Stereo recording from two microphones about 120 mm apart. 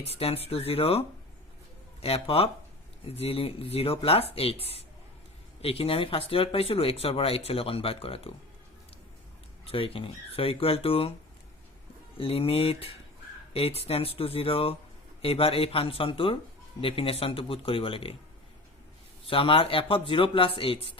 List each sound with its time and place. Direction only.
0.0 s speech: 55° left (ahead or behind)
5.6 s speech: 50° left (ahead or behind)
9.6 s speech: 50° left (ahead or behind)
12.1 s speech: 50° left (ahead or behind)
19.2 s speech: 50° left (ahead or behind)